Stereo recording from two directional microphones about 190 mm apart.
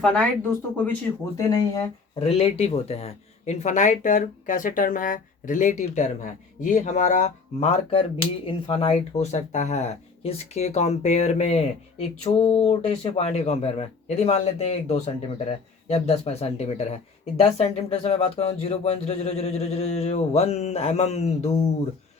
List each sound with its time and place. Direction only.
0.0 s speech: 5° left (ahead or behind)
1.4 s speech: 20° left (ahead or behind); by 21.5 s 35° left (ahead or behind)